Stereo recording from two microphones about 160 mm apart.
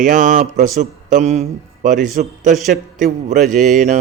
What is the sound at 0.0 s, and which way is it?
Mantra, 50° right (ahead or behind).